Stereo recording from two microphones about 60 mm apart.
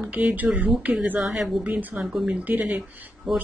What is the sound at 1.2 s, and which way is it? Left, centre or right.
Speech, centre.